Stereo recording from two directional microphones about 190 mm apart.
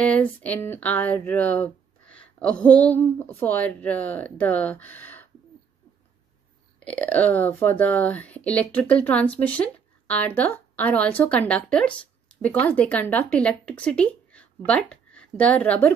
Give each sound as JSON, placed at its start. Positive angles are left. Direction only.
{"t": 0.0, "sound": "speech", "side_deg": 5}
{"t": 6.8, "sound": "a woman's voice", "side_deg": 5}